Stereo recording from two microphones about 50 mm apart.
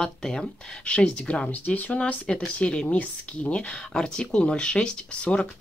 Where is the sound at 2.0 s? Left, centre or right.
Left.